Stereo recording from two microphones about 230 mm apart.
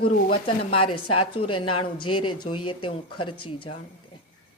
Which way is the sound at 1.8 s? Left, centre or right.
Left.